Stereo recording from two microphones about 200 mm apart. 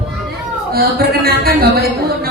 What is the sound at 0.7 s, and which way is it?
A woman's voice, 50° right (ahead or behind).